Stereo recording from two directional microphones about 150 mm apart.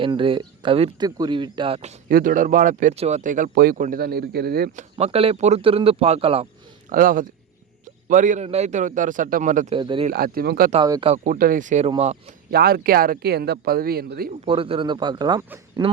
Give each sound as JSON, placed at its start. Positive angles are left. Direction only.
{"t": 0.0, "sound": "speech", "side_deg": -35}
{"t": 2.0, "sound": "speech", "side_deg": -70}
{"t": 2.9, "sound": "speech", "side_deg": -40}
{"t": 3.2, "sound": "speech", "side_deg": -60}
{"t": 4.8, "sound": "speech", "side_deg": -45}
{"t": 6.9, "sound": "a man's voice", "side_deg": -65}
{"t": 9.7, "sound": "speech", "side_deg": -35}
{"t": 10.1, "sound": "speech", "side_deg": -85}
{"t": 11.2, "sound": "speech", "side_deg": -65}
{"t": 11.9, "sound": "speech", "side_deg": -45}
{"t": 12.5, "sound": "speech", "side_deg": -90}
{"t": 14.4, "sound": "speech", "side_deg": -35}
{"t": 15.4, "sound": "speech", "side_deg": -15}